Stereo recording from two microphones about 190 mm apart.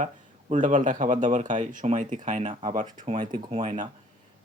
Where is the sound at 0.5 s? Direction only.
45° right (ahead or behind).